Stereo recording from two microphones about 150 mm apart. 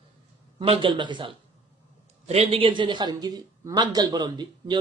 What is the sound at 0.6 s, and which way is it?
A man's voice, 35° right (ahead or behind).